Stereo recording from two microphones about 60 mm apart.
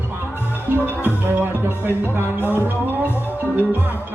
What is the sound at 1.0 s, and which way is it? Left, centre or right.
Music, right.